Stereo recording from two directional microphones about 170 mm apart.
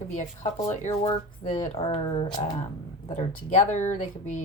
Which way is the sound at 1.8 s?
30° left (ahead or behind).